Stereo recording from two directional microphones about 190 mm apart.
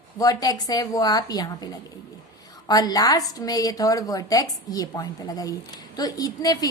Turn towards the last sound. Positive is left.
turn(degrees=20)  # may be behind; listen again after turning